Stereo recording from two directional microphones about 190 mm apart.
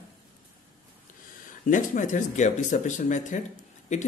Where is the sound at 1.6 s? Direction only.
45° left (ahead or behind).